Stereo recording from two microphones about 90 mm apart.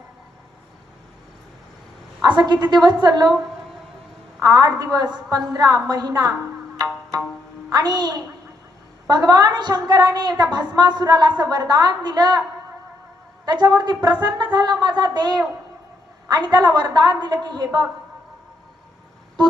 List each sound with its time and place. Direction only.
2.2 s a woman's voice: 55° right (ahead or behind)
4.4 s a woman's voice: 45° right (ahead or behind)
6.8 s music: 50° right (ahead or behind)
7.7 s a woman's voice: 50° right (ahead or behind)
13.4 s a woman's voice: 50° right (ahead or behind)